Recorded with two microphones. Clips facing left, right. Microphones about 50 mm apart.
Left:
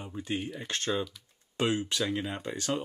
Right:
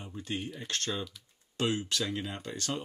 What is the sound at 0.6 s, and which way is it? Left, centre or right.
Speech, centre.